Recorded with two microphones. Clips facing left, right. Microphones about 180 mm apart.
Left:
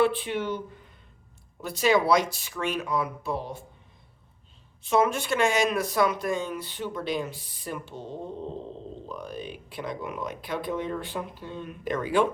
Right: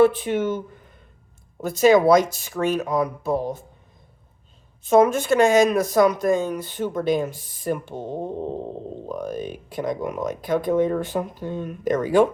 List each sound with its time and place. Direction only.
0.0 s speech: 45° right (ahead or behind)
1.6 s speech: 45° right (ahead or behind)
4.8 s speech: 45° right (ahead or behind)